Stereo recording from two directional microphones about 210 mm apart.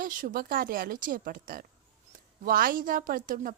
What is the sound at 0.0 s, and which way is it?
A woman's voice, 40° right (ahead or behind).